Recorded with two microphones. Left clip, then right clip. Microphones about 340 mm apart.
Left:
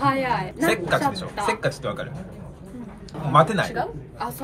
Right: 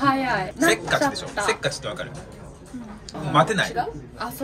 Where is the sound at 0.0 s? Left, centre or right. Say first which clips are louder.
Right 1 dB; centre.